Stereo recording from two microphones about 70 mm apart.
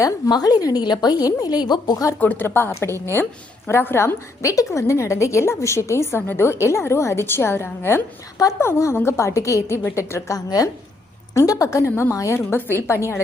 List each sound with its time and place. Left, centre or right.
0.3 s a woman's voice: left
2.1 s a woman's voice: left
4.4 s a woman's voice: left
10.3 s a woman's voice: left
12.5 s a woman's voice: left